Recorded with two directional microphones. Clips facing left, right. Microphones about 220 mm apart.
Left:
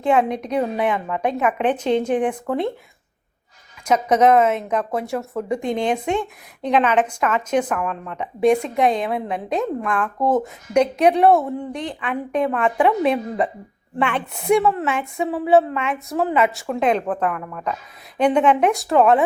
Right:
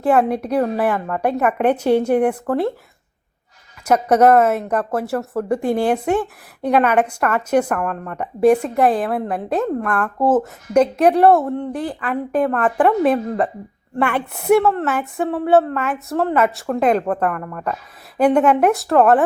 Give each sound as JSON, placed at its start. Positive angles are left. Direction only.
{"t": 0.0, "sound": "a woman's voice", "side_deg": -5}
{"t": 4.1, "sound": "a woman's voice", "side_deg": -5}